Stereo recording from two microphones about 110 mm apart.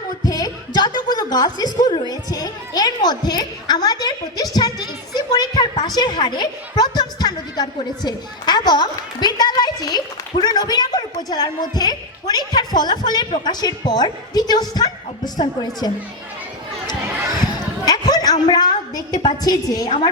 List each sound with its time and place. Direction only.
0.3 s a woman's voice: 35° left (ahead or behind)
4.5 s a sound: 40° left (ahead or behind)
5.8 s a woman's voice: 40° left (ahead or behind)
17.8 s a woman's voice: 35° left (ahead or behind)